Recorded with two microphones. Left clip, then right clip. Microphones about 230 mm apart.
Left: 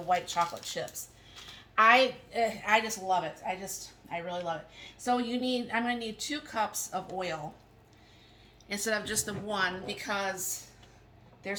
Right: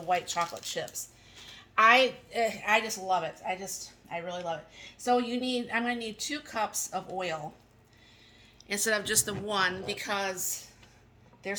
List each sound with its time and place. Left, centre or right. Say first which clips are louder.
0.1 s a woman's voice: even; right
8.6 s a woman's voice: right 3 dB; right